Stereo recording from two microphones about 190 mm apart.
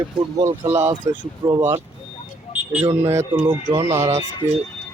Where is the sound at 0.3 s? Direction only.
15° right (ahead or behind).